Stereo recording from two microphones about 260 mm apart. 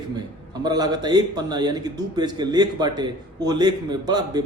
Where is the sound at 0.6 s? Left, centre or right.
Centre.